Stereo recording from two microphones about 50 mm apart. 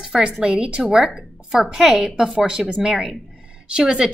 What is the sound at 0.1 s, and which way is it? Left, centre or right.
A woman's voice, centre.